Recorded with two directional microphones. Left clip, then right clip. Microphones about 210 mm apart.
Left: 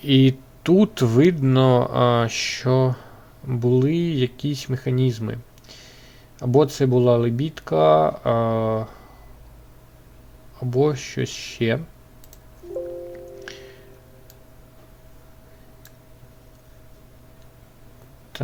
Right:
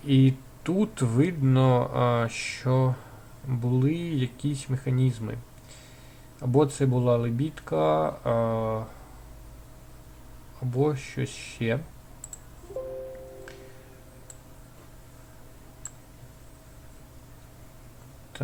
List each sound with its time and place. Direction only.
0.0 s speech: 40° left (ahead or behind)
10.7 s speech: 35° left (ahead or behind)